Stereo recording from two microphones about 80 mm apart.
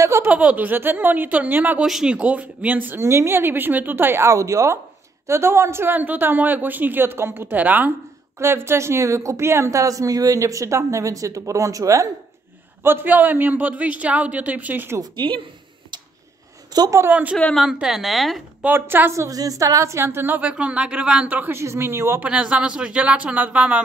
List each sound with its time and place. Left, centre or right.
0.2 s a woman's voice: centre
1.8 s a woman's voice: centre
8.4 s speech: right
12.8 s a woman's voice: right
15.0 s a woman's voice: right
16.7 s a woman's voice: right
17.1 s a woman's voice: centre
17.6 s a woman's voice: centre
18.8 s a woman's voice: right
19.2 s a woman's voice: right
21.5 s speech: right
22.2 s speech: centre